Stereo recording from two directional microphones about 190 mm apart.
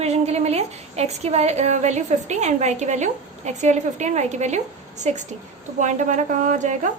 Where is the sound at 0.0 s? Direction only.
35° right (ahead or behind).